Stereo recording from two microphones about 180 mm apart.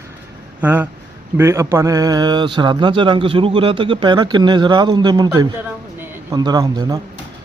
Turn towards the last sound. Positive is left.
turn(degrees=-20)  # may be behind; listen again after turning